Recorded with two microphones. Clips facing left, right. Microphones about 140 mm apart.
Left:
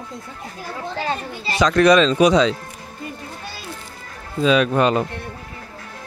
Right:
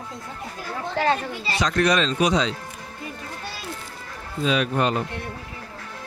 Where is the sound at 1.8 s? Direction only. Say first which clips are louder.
Left 7 dB; 90° left.